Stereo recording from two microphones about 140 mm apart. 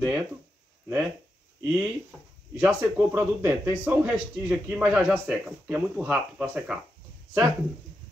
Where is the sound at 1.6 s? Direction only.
5° right (ahead or behind).